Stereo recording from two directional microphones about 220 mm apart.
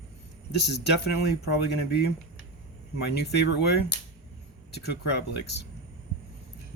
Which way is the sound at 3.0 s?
50° left (ahead or behind).